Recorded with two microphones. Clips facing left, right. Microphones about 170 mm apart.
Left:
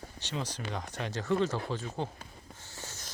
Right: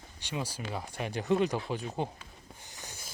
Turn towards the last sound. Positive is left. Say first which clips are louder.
# left 2 dB
turn(degrees=-15)  # may be behind; listen again after turning